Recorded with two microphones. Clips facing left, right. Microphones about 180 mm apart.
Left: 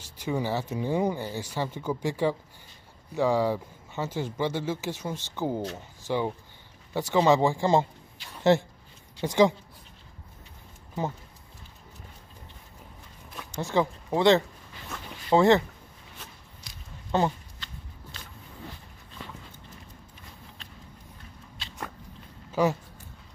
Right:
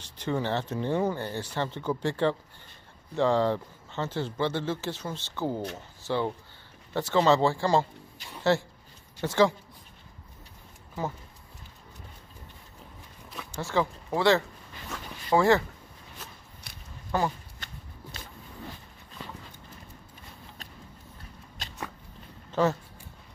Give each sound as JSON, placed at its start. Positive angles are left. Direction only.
{"t": 0.0, "sound": "speech", "side_deg": 10}
{"t": 13.5, "sound": "speech", "side_deg": 15}
{"t": 16.6, "sound": "a sound", "side_deg": -60}
{"t": 17.1, "sound": "speech", "side_deg": 25}
{"t": 21.6, "sound": "cat", "side_deg": -45}
{"t": 22.5, "sound": "speech", "side_deg": 10}